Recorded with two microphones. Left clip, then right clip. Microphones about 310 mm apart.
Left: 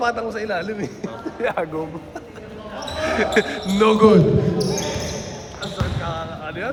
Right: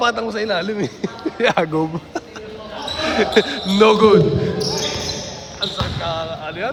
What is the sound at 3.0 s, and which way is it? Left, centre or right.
Speech, centre.